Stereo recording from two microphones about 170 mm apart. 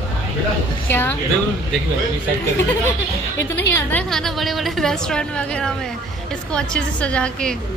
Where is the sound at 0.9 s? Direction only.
10° left (ahead or behind).